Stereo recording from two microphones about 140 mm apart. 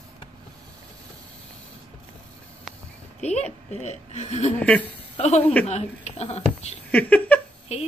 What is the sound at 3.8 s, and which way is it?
Speech, 50° left (ahead or behind).